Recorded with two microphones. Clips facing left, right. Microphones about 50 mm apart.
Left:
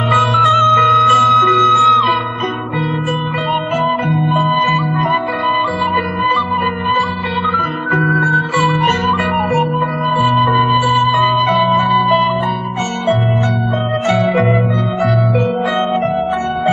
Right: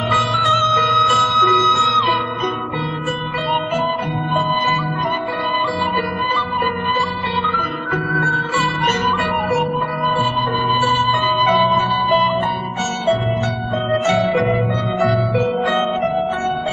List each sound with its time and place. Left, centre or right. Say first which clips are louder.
0.1 s music: left 5 dB; left
1.5 s music: left 4 dB; centre
3.8 s music: left 5 dB; centre
11.2 s music: left 2 dB; centre
14.0 s music: left 3 dB; centre